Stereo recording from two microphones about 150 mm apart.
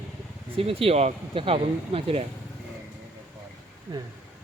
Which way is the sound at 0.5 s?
40° right (ahead or behind).